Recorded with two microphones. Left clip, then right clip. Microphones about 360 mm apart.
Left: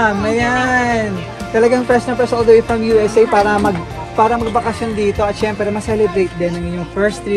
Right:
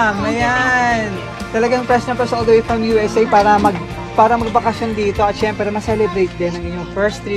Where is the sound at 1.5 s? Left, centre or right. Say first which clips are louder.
Left 2 dB; right.